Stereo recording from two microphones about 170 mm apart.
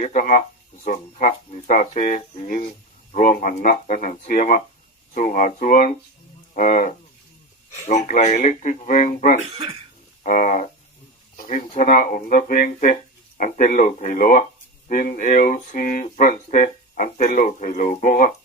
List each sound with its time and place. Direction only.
0.0 s speech: 50° left (ahead or behind)
6.5 s a sound: 50° left (ahead or behind)
7.9 s speech: 45° left (ahead or behind)